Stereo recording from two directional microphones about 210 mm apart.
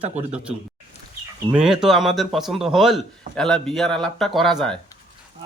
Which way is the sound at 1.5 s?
5° right (ahead or behind).